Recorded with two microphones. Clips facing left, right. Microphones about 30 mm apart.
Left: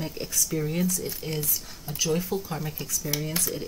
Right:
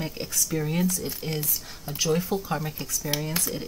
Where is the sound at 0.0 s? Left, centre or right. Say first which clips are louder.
Even; centre.